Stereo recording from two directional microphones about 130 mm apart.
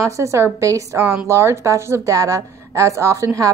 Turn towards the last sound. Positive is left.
turn(degrees=-25)  # may be behind; listen again after turning